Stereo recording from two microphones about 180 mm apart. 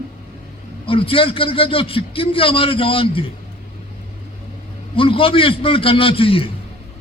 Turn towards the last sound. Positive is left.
turn(degrees=30)  # may be behind; listen again after turning